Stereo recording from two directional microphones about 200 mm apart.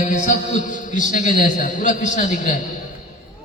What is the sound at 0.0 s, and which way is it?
A man's voice, 40° left (ahead or behind).